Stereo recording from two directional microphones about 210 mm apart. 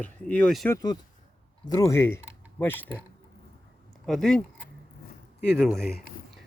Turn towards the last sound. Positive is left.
turn(degrees=5)  # may be behind; listen again after turning